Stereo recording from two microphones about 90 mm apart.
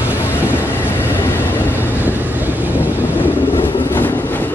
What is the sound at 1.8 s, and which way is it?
Vehicle, 20° right (ahead or behind).